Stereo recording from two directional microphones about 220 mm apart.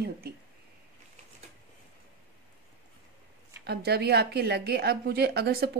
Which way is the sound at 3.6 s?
45° right (ahead or behind).